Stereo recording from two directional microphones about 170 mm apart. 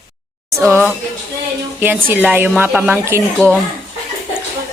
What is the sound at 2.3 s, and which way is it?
Speech, 10° right (ahead or behind).